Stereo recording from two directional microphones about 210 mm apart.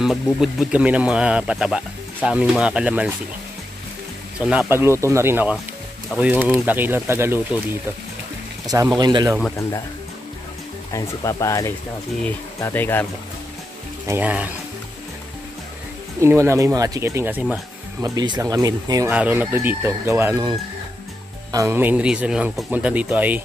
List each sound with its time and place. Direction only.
0.0 s speech: centre (ahead or behind)
4.4 s speech: 5° right (ahead or behind)
8.6 s speech: 15° right (ahead or behind)
10.9 s speech: 15° left (ahead or behind)
14.0 s speech: 10° right (ahead or behind)
16.2 s speech: 15° right (ahead or behind)
18.0 s speech: 20° right (ahead or behind)